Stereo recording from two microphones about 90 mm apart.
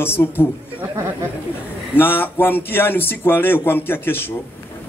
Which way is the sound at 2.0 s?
25° left (ahead or behind).